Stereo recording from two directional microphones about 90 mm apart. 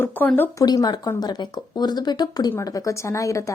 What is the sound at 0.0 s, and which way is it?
Speech, 20° left (ahead or behind).